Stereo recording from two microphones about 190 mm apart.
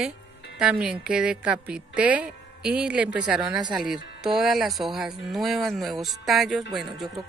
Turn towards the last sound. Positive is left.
turn(degrees=0)  # may be behind; listen again after turning